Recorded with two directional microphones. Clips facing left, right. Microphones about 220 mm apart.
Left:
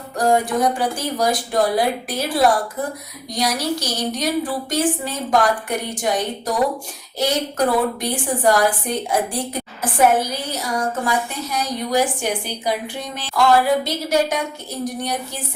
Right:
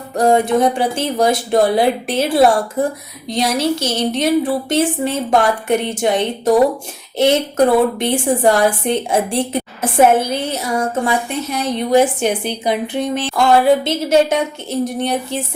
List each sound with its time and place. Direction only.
0.2 s a woman's voice: 25° right (ahead or behind)